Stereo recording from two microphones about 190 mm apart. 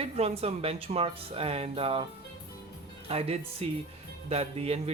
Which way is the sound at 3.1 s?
30° right (ahead or behind).